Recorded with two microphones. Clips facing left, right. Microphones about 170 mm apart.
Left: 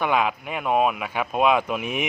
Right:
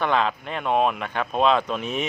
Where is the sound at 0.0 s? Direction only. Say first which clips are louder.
Even; 10° left (ahead or behind).